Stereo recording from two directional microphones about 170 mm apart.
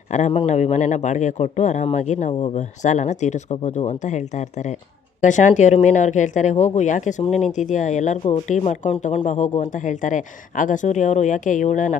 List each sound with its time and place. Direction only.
0.1 s speech: 40° left (ahead or behind)